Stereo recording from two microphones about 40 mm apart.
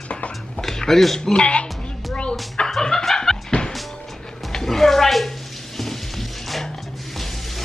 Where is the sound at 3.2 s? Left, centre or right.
Centre.